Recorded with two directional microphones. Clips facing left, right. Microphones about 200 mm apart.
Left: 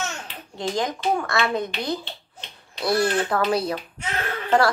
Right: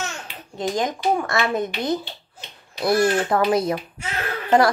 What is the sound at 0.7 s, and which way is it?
Speech, 20° right (ahead or behind).